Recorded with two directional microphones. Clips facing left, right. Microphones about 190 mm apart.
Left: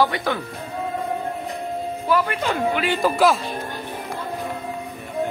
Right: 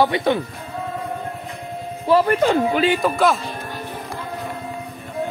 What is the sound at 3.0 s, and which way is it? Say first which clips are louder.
Speech: even; centre (ahead or behind).